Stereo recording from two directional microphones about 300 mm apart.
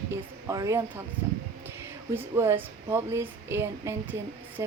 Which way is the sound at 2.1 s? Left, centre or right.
Centre.